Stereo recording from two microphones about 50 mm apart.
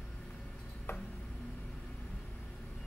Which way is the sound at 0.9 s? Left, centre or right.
Left.